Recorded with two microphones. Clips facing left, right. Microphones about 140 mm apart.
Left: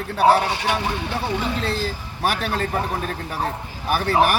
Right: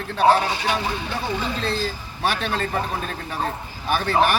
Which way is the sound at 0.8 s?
65° left (ahead or behind).